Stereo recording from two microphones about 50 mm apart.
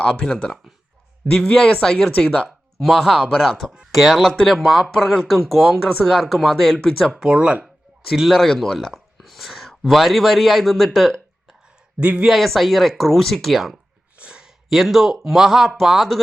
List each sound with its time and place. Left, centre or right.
0.0 s speech: left
2.1 s speech: left
2.7 s speech: centre
7.1 s speech: centre
8.1 s a man's voice: centre
10.9 s a sound: centre
11.9 s speech: right
12.2 s speech: centre
14.2 s a sound: right
14.4 s a man's voice: centre